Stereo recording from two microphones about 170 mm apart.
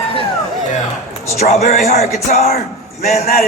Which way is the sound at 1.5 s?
40° left (ahead or behind).